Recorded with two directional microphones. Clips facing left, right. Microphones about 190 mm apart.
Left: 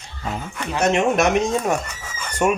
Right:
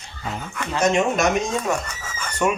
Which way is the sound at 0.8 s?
60° left (ahead or behind).